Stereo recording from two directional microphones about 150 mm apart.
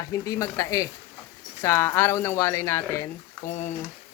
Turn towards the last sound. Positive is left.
turn(degrees=15)  # may be behind; listen again after turning